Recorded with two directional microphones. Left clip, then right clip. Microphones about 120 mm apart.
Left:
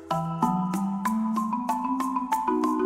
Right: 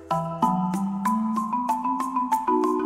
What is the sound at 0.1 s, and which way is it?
Music, centre (ahead or behind).